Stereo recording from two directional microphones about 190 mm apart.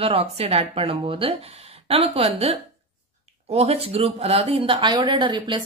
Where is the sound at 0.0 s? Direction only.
30° right (ahead or behind).